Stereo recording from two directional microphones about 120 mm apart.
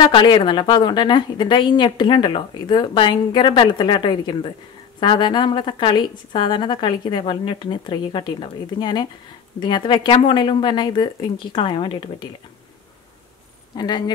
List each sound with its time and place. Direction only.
0.0 s a woman's voice: 40° left (ahead or behind)
13.7 s a woman's voice: 35° left (ahead or behind)